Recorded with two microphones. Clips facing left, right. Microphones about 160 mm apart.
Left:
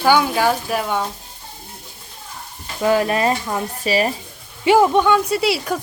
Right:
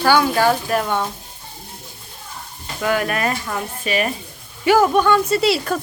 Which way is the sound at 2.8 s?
25° left (ahead or behind).